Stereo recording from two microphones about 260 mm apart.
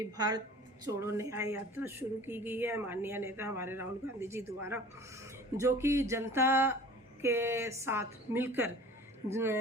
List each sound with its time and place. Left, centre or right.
0.0 s speech: centre
5.5 s speech: centre